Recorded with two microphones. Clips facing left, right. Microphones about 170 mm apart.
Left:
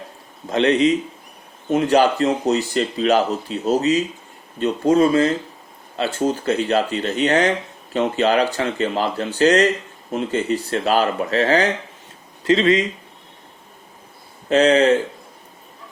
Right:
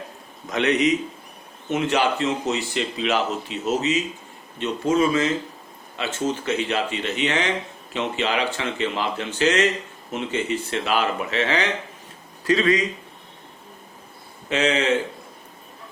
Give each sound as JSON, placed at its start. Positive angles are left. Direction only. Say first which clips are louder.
{"t": 0.4, "sound": "speech", "louder": "left 4 dB", "side_deg": 30}
{"t": 12.5, "sound": "speech", "louder": "left 4 dB", "side_deg": 25}
{"t": 14.5, "sound": "speech", "louder": "left 7 dB", "side_deg": 40}